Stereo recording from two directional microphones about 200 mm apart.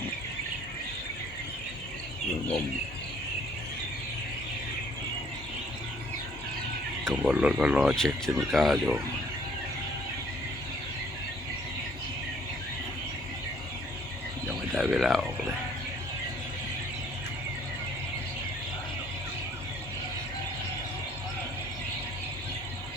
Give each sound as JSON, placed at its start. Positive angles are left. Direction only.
{"t": 7.1, "sound": "speech", "side_deg": -5}
{"t": 14.8, "sound": "speech", "side_deg": -5}